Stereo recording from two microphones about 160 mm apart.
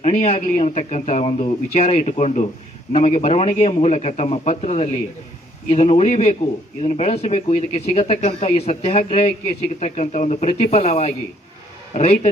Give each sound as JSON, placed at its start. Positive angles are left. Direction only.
{"t": 0.0, "sound": "a man's voice", "side_deg": 45}